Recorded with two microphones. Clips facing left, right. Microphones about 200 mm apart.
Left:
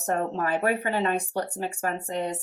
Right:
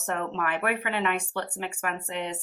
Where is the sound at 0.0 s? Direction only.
35° left (ahead or behind).